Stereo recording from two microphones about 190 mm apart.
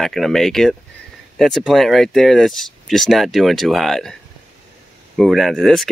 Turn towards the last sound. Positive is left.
turn(degrees=0)  # may be behind; listen again after turning